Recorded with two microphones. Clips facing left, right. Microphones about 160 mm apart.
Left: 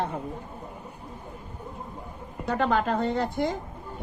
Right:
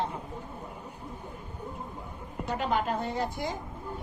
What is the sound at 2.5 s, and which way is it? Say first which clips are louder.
Speech: left 5 dB; 60° left (ahead or behind).